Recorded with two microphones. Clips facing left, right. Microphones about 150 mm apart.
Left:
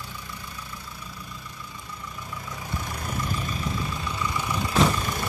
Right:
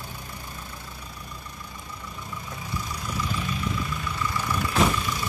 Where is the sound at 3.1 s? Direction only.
45° left (ahead or behind).